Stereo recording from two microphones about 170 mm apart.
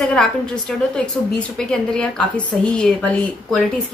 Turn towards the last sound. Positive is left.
turn(degrees=5)  # may be behind; listen again after turning